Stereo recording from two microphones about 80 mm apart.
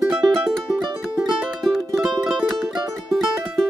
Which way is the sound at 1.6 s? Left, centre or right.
Centre.